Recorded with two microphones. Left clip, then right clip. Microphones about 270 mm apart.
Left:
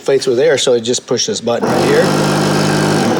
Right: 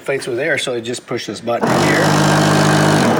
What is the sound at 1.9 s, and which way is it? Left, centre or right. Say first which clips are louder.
Speech: left 5 dB; right.